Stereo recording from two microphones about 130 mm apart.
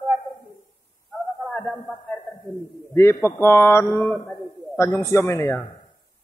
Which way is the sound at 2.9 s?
20° left (ahead or behind).